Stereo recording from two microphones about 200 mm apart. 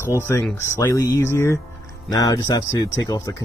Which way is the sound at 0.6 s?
15° left (ahead or behind).